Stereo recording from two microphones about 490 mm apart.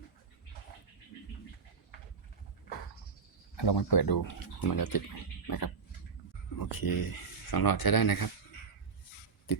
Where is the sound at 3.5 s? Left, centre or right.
Left.